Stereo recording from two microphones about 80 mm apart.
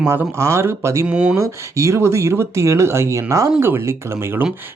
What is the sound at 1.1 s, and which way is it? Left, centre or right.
Speech, centre.